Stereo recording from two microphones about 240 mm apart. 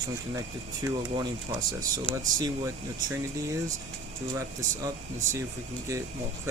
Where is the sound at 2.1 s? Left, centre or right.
Left.